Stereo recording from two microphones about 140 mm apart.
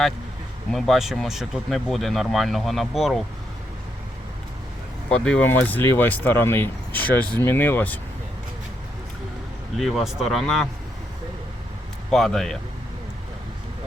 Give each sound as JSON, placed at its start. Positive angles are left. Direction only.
{"t": 0.7, "sound": "speech", "side_deg": 0}
{"t": 5.1, "sound": "speech", "side_deg": 5}
{"t": 9.7, "sound": "speech", "side_deg": 0}
{"t": 12.1, "sound": "speech", "side_deg": 0}